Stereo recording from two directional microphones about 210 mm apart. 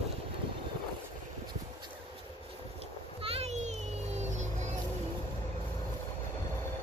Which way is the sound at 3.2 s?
30° right (ahead or behind).